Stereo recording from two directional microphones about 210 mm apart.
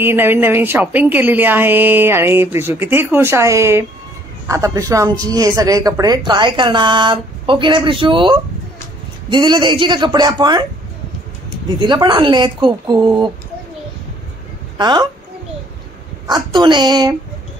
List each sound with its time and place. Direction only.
0.0 s a woman's voice: 10° right (ahead or behind)
11.8 s a woman's voice: 20° right (ahead or behind)
14.8 s a woman's voice: 20° right (ahead or behind)
16.3 s a woman's voice: 20° right (ahead or behind)